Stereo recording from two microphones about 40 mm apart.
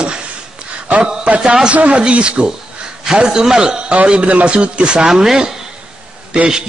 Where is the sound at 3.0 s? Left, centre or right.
Centre.